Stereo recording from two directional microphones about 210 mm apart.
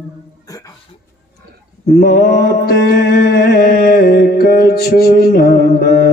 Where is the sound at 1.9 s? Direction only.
45° left (ahead or behind).